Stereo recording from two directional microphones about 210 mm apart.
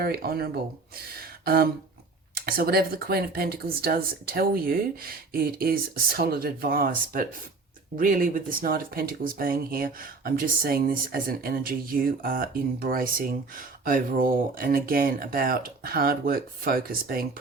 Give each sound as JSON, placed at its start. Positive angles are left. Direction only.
{"t": 0.0, "sound": "speech", "side_deg": -45}
{"t": 1.1, "sound": "a sound", "side_deg": -45}
{"t": 2.3, "sound": "speech", "side_deg": -45}